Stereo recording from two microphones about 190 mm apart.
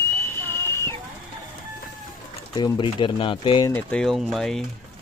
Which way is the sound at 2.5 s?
25° left (ahead or behind).